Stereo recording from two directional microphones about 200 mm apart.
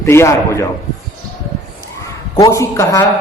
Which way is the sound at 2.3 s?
15° left (ahead or behind).